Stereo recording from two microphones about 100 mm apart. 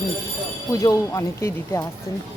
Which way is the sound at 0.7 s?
35° left (ahead or behind).